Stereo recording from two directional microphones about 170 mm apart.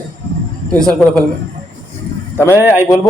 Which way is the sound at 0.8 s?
5° left (ahead or behind).